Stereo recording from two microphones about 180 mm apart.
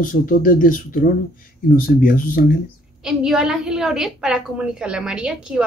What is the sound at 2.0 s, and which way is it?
Speech, 50° left (ahead or behind).